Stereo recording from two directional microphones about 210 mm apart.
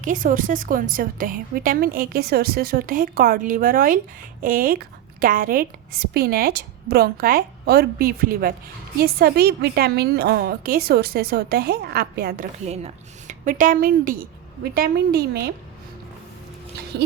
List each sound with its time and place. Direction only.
0.0 s speech: 40° right (ahead or behind)
16.9 s speech: 55° right (ahead or behind)